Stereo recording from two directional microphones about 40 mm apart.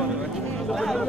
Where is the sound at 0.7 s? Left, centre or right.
Centre.